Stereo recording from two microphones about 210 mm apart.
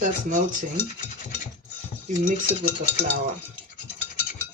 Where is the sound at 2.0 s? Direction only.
40° right (ahead or behind).